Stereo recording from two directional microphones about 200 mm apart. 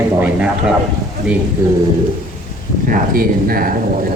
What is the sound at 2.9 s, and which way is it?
Speech, 45° right (ahead or behind).